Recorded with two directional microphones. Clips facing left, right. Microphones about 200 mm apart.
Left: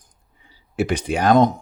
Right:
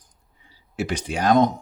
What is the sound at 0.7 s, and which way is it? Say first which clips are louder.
Speech: left 5 dB; 55° left (ahead or behind).